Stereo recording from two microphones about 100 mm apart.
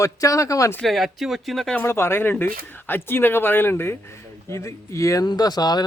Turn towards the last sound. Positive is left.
turn(degrees=45)  # may be behind; listen again after turning